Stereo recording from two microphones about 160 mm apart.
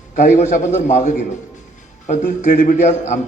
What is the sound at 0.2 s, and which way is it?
A man's voice, 50° left (ahead or behind).